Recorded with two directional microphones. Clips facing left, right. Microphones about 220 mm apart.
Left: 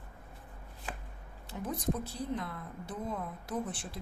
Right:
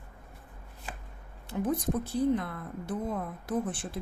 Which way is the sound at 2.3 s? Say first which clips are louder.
Right 6 dB; 55° right (ahead or behind).